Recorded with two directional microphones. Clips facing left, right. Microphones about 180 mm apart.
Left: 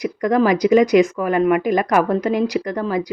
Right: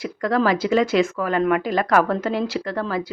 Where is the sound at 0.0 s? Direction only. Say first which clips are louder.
Left 4 dB; 15° left (ahead or behind).